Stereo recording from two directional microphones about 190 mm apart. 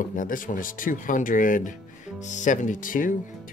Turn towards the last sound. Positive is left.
turn(degrees=45)  # may be behind; listen again after turning